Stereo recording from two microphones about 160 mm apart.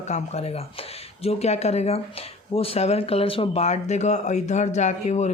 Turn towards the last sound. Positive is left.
turn(degrees=45)  # may be behind; listen again after turning